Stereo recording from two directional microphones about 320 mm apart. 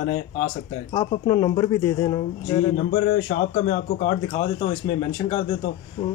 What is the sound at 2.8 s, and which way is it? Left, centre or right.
Speech, left.